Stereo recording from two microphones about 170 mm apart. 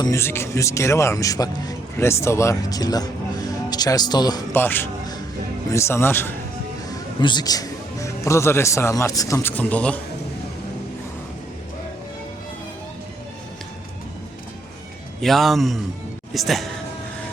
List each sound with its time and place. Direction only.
0.0 s speech: 15° left (ahead or behind)
4.5 s speech: 10° left (ahead or behind)
7.2 s a man's voice: 25° left (ahead or behind); by 10.0 s 10° left (ahead or behind)
15.2 s a man's voice: centre (ahead or behind)